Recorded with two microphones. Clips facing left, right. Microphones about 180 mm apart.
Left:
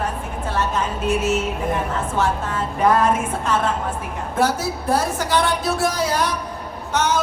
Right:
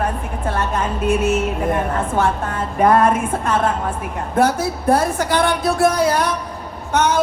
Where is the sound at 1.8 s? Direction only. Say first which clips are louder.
Right 3 dB; 60° right (ahead or behind).